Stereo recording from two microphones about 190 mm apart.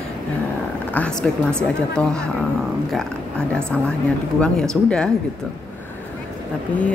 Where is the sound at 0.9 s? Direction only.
5° left (ahead or behind).